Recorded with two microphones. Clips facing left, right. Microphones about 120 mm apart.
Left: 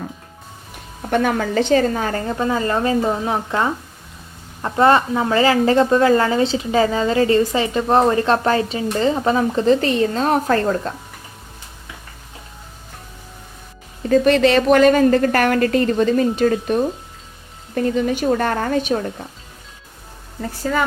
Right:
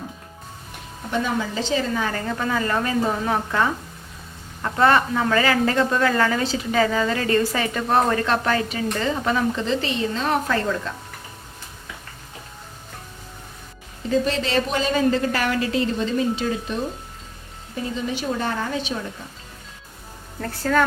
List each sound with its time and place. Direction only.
1.1 s a woman's voice: 60° left (ahead or behind); by 10.9 s 40° left (ahead or behind)
14.1 s speech: 60° left (ahead or behind)
20.4 s speech: 10° left (ahead or behind)